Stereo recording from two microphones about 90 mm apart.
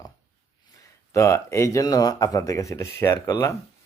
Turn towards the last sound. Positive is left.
turn(degrees=35)  # may be behind; listen again after turning